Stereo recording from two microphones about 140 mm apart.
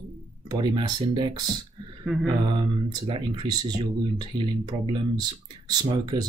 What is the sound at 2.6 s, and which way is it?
Speech, 35° right (ahead or behind).